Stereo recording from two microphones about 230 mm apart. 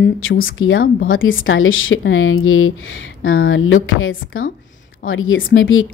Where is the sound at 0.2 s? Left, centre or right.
Left.